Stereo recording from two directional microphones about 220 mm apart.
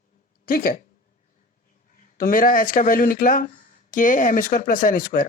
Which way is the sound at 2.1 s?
40° left (ahead or behind).